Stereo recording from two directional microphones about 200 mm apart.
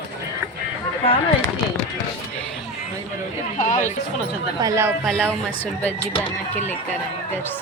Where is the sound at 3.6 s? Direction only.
40° left (ahead or behind).